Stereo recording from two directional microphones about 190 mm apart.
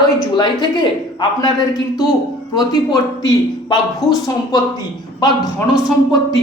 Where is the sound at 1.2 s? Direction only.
20° left (ahead or behind).